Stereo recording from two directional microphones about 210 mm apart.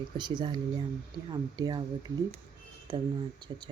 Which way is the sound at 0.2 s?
20° right (ahead or behind).